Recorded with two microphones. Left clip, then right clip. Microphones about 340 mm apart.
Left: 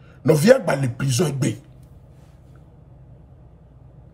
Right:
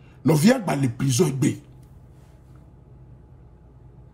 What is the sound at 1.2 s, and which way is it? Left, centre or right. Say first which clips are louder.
Speech: right 1 dB; left.